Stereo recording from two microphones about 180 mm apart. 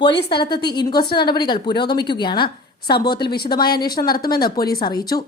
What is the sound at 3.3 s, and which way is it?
Speech, 60° left (ahead or behind).